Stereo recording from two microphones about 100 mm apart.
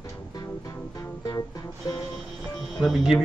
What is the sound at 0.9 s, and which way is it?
Music, 35° left (ahead or behind).